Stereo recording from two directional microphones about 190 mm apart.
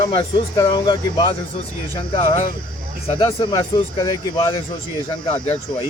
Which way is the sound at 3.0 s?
30° left (ahead or behind).